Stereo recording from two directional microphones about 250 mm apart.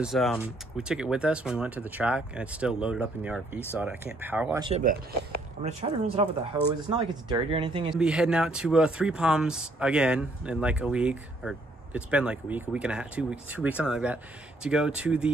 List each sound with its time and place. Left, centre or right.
0.0 s speech: centre
5.6 s speech: right
8.0 s speech: centre